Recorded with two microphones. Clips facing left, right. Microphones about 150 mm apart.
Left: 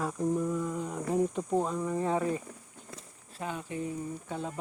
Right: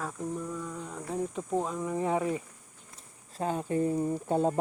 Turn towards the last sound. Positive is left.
turn(degrees=-45)  # may be behind; listen again after turning